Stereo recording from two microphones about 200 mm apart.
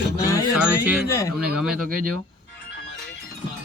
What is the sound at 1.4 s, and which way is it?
Speech, 5° right (ahead or behind).